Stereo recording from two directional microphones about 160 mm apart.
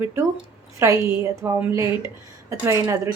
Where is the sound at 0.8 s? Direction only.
20° right (ahead or behind).